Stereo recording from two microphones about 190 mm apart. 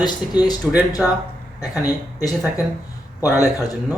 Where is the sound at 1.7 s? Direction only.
20° left (ahead or behind).